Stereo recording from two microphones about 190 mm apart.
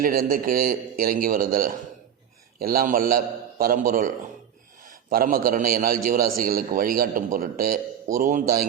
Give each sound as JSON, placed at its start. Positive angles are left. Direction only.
{"t": 0.0, "sound": "a man's voice", "side_deg": -50}